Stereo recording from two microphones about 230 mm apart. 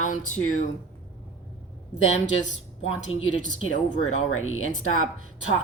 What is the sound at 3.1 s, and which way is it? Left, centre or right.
Speech, left.